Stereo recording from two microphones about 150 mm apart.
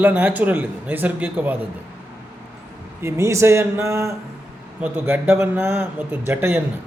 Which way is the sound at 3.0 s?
20° right (ahead or behind).